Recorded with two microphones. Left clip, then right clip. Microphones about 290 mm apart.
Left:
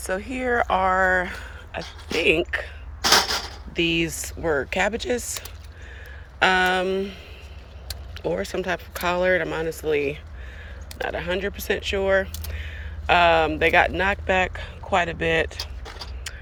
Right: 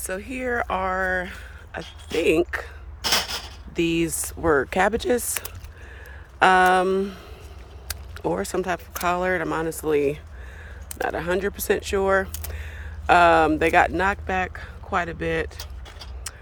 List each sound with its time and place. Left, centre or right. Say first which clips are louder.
0.0 s speech: left 2 dB; centre
3.8 s speech: left 1 dB; centre
6.4 s speech: right 3 dB; centre